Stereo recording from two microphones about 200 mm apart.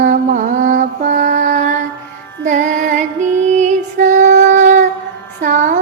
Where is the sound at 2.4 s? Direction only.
40° right (ahead or behind).